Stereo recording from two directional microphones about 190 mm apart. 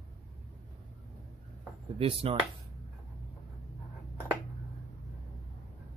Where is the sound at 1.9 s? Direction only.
30° right (ahead or behind).